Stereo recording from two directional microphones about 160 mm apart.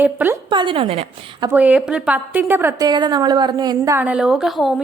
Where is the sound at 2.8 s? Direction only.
25° right (ahead or behind).